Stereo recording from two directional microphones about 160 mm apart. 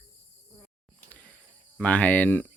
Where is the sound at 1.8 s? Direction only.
10° left (ahead or behind).